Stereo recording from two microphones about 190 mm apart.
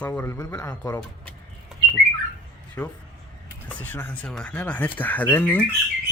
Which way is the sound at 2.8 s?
5° left (ahead or behind).